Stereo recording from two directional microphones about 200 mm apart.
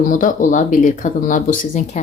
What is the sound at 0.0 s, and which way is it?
Speech, 40° left (ahead or behind).